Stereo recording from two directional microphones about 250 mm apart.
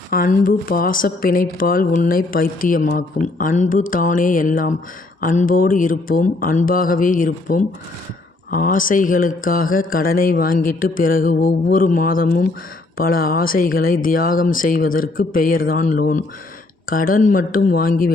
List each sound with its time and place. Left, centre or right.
0.1 s speech: left